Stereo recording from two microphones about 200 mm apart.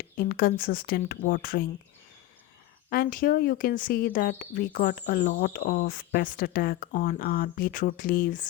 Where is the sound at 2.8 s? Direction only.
50° left (ahead or behind).